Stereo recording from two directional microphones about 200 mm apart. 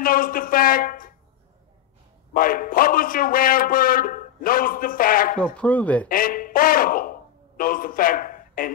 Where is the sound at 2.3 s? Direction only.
45° left (ahead or behind).